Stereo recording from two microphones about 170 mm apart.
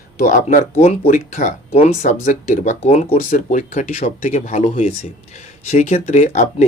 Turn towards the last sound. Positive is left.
turn(degrees=45)  # may be behind; listen again after turning